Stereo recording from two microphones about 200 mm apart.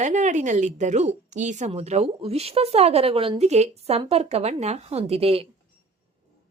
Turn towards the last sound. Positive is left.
turn(degrees=-30)  # may be behind; listen again after turning